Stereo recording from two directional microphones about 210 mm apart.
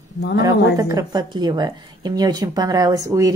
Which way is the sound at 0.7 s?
15° right (ahead or behind).